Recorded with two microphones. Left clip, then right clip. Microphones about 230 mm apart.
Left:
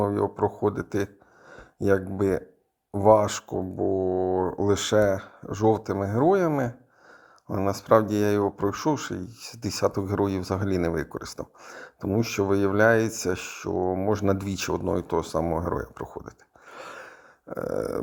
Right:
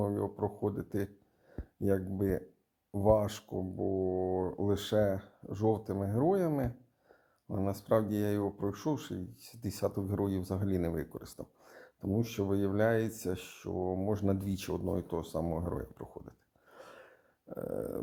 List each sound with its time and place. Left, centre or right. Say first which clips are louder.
0.0 s speech: left 10 dB; left